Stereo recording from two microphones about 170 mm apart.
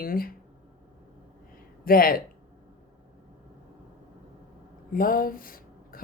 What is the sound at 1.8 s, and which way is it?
Speech, 55° left (ahead or behind).